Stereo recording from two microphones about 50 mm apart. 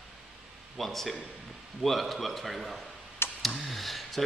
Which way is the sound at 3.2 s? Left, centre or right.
Left.